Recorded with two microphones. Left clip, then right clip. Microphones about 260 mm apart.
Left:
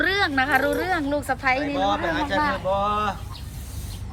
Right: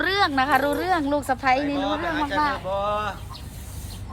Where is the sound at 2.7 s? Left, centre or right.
Left.